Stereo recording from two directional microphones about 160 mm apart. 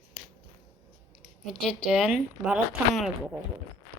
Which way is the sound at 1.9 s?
5° right (ahead or behind).